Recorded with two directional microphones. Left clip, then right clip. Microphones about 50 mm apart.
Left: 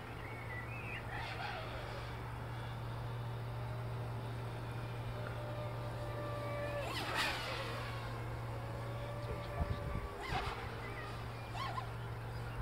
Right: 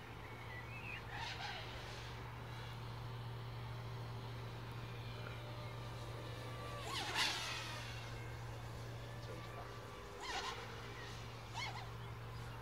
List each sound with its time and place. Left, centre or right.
1.2 s vehicle: left
6.8 s vehicle: left
10.2 s a sound: left